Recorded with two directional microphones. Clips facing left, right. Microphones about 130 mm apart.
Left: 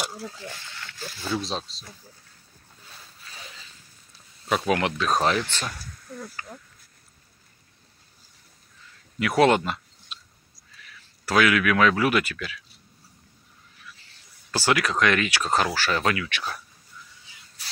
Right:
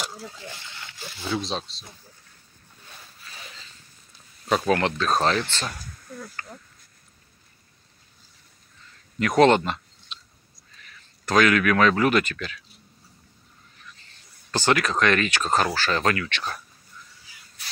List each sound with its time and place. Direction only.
0.0 s a sound: 5° left (ahead or behind)
0.7 s a sound: 15° right (ahead or behind)
1.3 s speech: 5° left (ahead or behind)
4.5 s speech: 5° left (ahead or behind)
5.7 s speech: 5° right (ahead or behind)
9.2 s speech: 10° left (ahead or behind)
11.2 s speech: 10° left (ahead or behind)
13.8 s speech: 10° left (ahead or behind)